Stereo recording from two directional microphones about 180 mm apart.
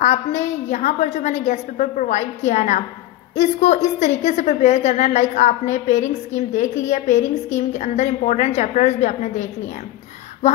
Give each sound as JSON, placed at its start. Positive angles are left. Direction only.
{"t": 0.0, "sound": "a woman's voice", "side_deg": 40}